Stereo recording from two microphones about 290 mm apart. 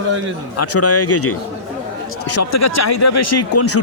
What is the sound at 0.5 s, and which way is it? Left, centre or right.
Speech, left.